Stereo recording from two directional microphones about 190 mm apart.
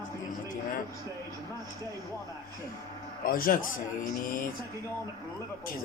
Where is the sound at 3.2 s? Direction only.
50° left (ahead or behind).